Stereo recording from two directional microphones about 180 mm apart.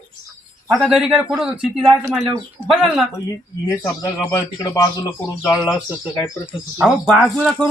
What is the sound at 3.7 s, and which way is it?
Speech, 15° left (ahead or behind).